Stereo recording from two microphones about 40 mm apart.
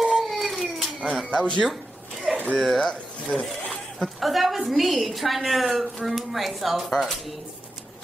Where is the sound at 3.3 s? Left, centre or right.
Left.